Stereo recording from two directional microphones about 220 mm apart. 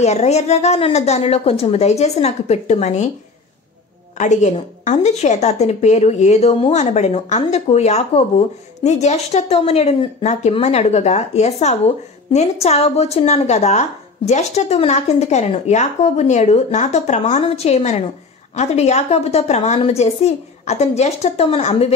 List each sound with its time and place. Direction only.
0.0 s a woman's voice: 30° left (ahead or behind)
4.2 s a woman's voice: 30° left (ahead or behind)